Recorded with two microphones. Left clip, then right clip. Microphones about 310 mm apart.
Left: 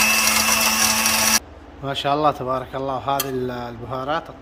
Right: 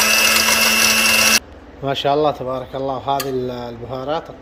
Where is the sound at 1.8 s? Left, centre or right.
Centre.